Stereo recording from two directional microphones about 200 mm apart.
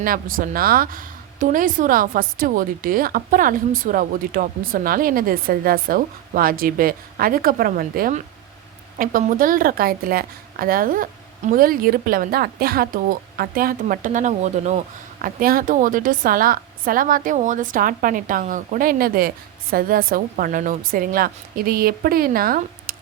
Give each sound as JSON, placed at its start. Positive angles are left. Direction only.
{"t": 0.0, "sound": "a woman's voice", "side_deg": -45}